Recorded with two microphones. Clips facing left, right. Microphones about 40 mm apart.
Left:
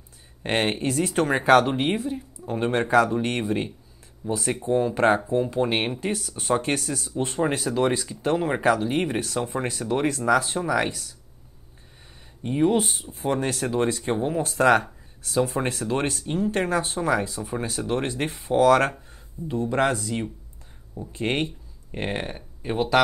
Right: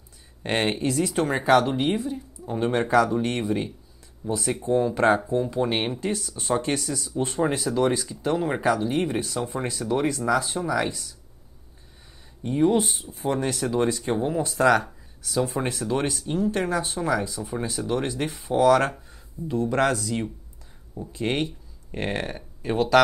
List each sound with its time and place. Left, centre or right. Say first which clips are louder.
0.4 s speech: even; left
12.4 s speech: even; left